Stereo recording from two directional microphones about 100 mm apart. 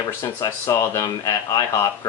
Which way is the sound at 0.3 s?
30° left (ahead or behind).